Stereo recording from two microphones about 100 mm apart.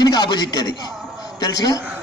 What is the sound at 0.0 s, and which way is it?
A man's voice, 45° left (ahead or behind).